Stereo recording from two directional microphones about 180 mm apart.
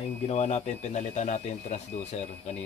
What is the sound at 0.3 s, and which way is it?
Speech, 35° left (ahead or behind).